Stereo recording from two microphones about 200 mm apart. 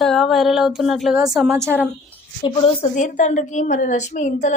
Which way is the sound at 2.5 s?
30° left (ahead or behind).